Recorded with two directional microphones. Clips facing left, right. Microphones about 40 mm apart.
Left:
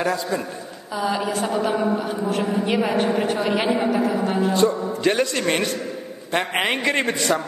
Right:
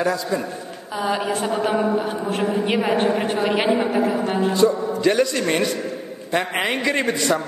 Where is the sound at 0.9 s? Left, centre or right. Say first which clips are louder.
Right 1 dB; right.